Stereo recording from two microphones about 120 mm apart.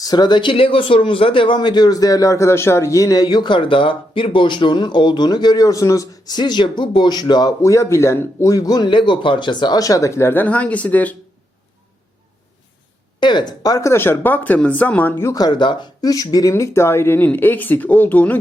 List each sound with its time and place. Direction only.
0.0 s speech: 35° left (ahead or behind); by 11.2 s 15° left (ahead or behind)
13.1 s speech: 40° left (ahead or behind); by 15.1 s 15° left (ahead or behind)
15.2 s speech: 30° left (ahead or behind); by 18.3 s 15° left (ahead or behind)